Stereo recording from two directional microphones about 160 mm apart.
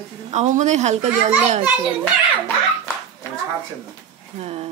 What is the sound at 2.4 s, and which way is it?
Hands, 15° left (ahead or behind).